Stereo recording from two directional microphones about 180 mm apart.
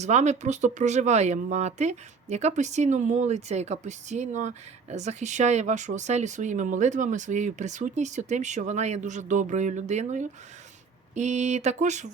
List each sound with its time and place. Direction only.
0.0 s speech: 40° right (ahead or behind)